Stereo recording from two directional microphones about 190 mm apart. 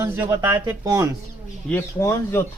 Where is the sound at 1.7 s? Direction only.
10° left (ahead or behind).